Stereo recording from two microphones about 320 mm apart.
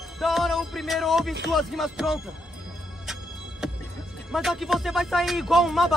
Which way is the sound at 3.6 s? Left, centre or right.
Centre.